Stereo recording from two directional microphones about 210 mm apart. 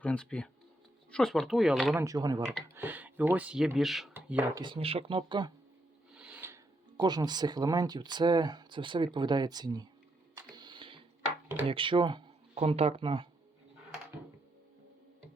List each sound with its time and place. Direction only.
0.0 s speech: 5° left (ahead or behind)
2.0 s speech: 15° right (ahead or behind)
4.6 s speech: 25° right (ahead or behind)
6.1 s a sound: 5° right (ahead or behind)
6.9 s speech: 20° right (ahead or behind)
10.3 s a sound: 20° right (ahead or behind)
11.4 s speech: 25° right (ahead or behind)